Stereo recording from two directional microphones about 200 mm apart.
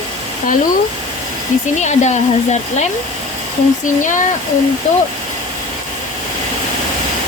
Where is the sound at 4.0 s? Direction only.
40° left (ahead or behind).